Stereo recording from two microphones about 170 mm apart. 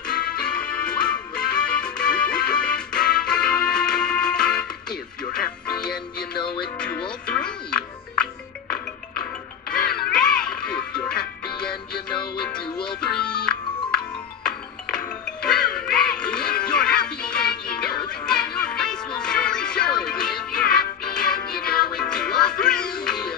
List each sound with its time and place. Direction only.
0.6 s music: 5° left (ahead or behind)
12.6 s music: 30° left (ahead or behind)
13.0 s music: 5° left (ahead or behind)